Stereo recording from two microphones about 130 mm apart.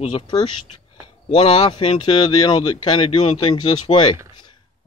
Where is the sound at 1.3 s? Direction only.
45° left (ahead or behind).